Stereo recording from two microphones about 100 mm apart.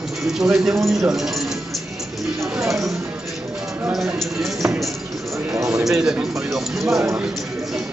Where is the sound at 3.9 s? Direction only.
Centre (ahead or behind).